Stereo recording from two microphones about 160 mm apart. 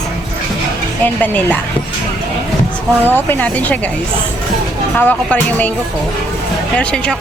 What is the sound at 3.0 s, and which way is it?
Speech, 10° left (ahead or behind).